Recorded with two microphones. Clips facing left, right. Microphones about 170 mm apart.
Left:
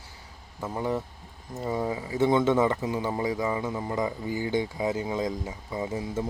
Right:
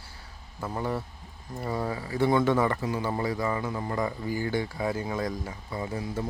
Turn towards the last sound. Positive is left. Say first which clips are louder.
# left 2 dB
turn(degrees=20)  # may be behind; listen again after turning